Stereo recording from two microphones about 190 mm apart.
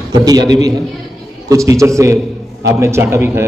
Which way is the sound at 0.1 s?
20° right (ahead or behind).